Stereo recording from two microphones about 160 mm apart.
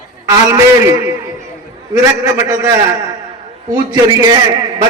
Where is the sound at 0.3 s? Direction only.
20° right (ahead or behind).